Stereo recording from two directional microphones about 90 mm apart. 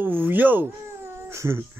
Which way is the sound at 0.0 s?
25° right (ahead or behind).